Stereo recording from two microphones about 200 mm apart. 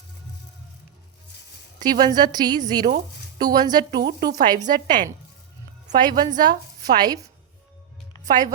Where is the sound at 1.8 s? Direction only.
20° right (ahead or behind).